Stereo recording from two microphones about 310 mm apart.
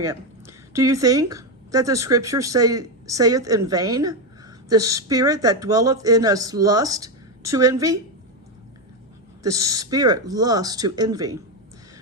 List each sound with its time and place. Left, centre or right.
0.0 s a woman's voice: centre
9.4 s speech: centre